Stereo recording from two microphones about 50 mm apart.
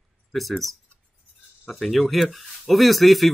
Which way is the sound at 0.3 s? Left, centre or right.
Centre.